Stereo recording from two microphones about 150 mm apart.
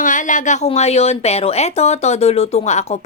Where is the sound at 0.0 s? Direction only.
60° left (ahead or behind).